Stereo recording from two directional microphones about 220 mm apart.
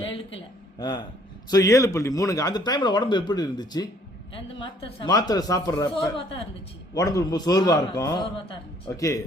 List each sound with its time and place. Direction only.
0.1 s a man's voice: 20° left (ahead or behind)